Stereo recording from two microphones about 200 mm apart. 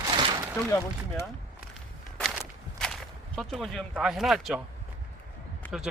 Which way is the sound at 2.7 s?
Centre (ahead or behind).